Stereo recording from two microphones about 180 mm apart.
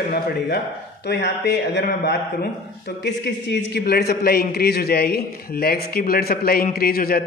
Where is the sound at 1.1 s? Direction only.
70° left (ahead or behind).